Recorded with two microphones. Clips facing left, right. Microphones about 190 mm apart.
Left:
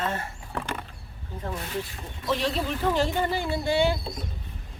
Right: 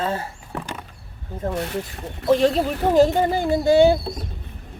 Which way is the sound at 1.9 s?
45° right (ahead or behind).